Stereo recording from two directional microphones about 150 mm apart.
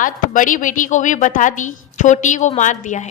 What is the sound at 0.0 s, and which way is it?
A woman's voice, 60° left (ahead or behind).